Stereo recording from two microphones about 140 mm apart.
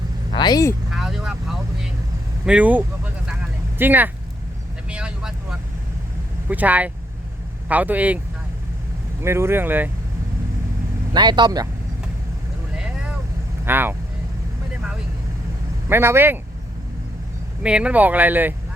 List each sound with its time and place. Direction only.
0.3 s speech: 30° left (ahead or behind)
0.9 s vehicle: 5° right (ahead or behind)
2.4 s speech: 10° right (ahead or behind)
4.9 s vehicle: 5° right (ahead or behind)
6.5 s speech: 10° right (ahead or behind)
9.2 s speech: 20° right (ahead or behind)
11.1 s speech: 30° right (ahead or behind)
12.7 s vehicle: 5° right (ahead or behind)
13.7 s speech: 15° right (ahead or behind)
15.9 s speech: 15° right (ahead or behind)
17.6 s speech: 10° right (ahead or behind)